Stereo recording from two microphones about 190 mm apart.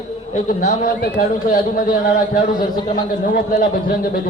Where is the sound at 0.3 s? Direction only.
40° left (ahead or behind).